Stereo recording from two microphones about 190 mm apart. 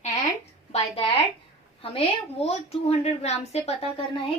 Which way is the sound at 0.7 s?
30° left (ahead or behind).